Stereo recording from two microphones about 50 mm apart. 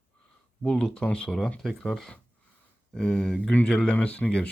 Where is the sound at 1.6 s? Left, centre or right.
Centre.